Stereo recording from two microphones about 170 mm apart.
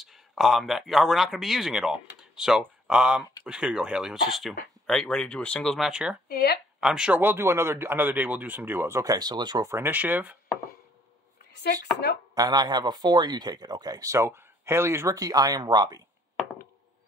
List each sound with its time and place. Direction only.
0.0 s speech: centre (ahead or behind)
6.2 s speech: 70° left (ahead or behind)
6.8 s speech: 5° right (ahead or behind)
12.4 s speech: 25° right (ahead or behind)